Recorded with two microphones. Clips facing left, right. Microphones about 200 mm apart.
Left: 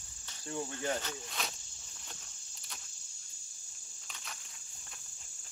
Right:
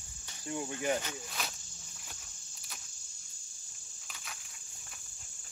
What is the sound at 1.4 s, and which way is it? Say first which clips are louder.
Insect: even; centre (ahead or behind).